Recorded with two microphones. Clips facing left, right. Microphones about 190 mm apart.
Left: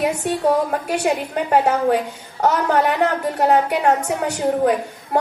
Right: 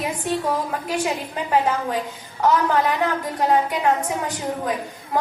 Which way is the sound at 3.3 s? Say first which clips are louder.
Left 2 dB; 65° left (ahead or behind).